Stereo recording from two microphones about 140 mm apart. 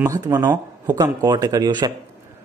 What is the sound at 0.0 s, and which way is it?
Speech, 25° right (ahead or behind).